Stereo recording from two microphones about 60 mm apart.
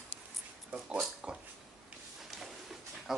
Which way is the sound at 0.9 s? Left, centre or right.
Centre.